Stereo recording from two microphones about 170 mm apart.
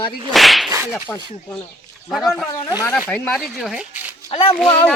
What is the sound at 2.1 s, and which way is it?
Speech, centre (ahead or behind).